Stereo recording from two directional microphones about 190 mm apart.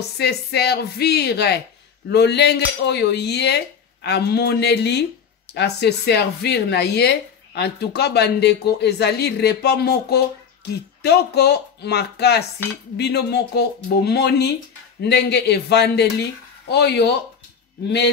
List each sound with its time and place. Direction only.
0.2 s speech: 60° left (ahead or behind)